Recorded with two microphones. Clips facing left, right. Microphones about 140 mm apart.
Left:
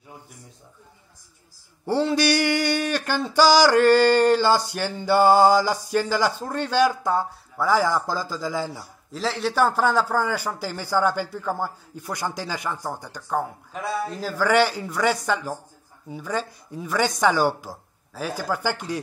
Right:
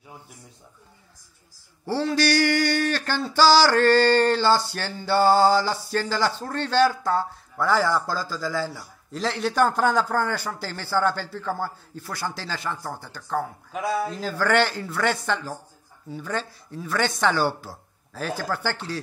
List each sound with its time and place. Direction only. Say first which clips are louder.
1.9 s a man's voice: left 2 dB; 20° left (ahead or behind)
9.1 s a man's voice: even; centre (ahead or behind)
13.7 s a man's voice: right 2 dB; 5° right (ahead or behind)
14.2 s a man's voice: left 3 dB; 10° left (ahead or behind)